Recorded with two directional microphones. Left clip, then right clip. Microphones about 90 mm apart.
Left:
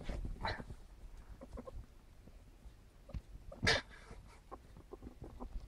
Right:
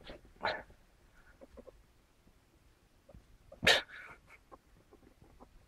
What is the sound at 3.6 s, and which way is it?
Dog, 45° right (ahead or behind).